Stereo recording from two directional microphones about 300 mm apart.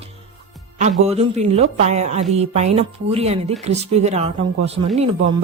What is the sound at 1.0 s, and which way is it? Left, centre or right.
A woman's voice, right.